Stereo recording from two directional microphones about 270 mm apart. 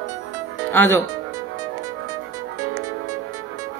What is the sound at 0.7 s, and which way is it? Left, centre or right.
Speech, centre.